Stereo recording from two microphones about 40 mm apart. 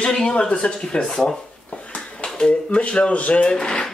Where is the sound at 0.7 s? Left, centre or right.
Centre.